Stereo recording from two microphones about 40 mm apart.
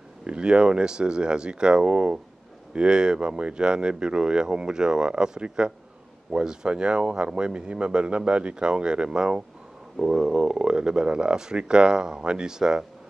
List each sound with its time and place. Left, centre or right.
0.2 s speech: right